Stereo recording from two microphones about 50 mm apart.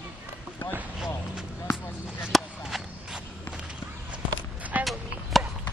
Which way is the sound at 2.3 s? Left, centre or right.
Centre.